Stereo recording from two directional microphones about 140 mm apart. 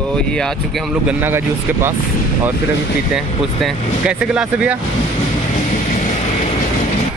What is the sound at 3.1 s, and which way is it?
Speech, 5° right (ahead or behind).